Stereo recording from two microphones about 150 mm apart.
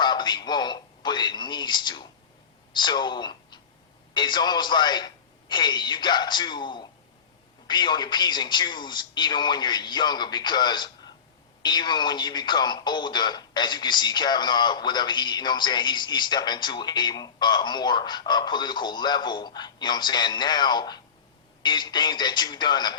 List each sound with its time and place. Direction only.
0.0 s speech: 30° left (ahead or behind)